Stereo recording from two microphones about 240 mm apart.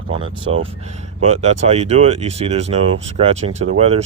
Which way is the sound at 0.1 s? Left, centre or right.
Right.